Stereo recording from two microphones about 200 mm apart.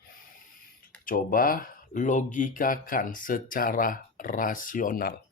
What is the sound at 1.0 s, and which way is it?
Speech, 45° left (ahead or behind).